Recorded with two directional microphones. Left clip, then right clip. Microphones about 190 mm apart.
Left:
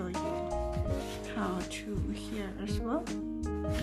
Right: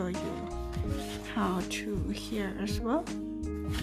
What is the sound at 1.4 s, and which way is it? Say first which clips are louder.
Speech: right 5 dB; 25° right (ahead or behind).